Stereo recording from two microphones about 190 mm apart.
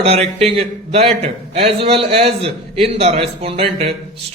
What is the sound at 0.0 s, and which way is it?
A man's voice, 35° right (ahead or behind).